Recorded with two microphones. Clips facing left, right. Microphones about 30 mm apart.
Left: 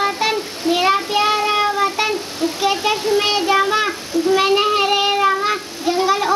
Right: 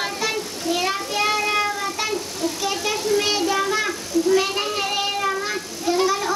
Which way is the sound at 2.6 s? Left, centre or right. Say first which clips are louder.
Left 9 dB; left.